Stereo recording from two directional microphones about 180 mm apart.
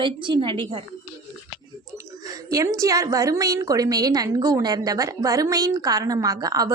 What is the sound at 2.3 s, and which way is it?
A woman's voice, 20° right (ahead or behind).